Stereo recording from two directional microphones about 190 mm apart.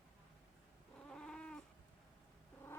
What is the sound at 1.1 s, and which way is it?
Cat, 5° left (ahead or behind).